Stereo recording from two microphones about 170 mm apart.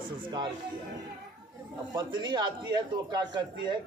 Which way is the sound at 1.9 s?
25° right (ahead or behind).